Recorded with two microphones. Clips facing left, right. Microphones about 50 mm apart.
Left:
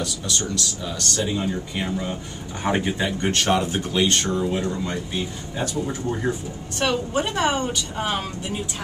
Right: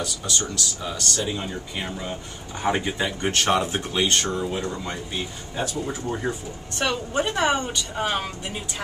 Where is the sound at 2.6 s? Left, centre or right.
Centre.